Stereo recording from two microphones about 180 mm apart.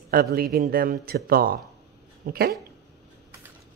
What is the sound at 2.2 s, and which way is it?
Dog, 55° right (ahead or behind).